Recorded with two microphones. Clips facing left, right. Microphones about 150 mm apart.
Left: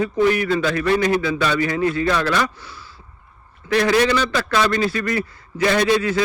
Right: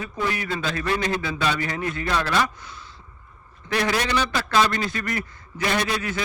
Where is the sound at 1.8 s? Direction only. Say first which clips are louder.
Left 9 dB; 25° left (ahead or behind).